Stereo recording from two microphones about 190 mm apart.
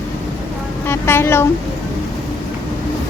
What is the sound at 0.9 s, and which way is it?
Speech, 15° left (ahead or behind).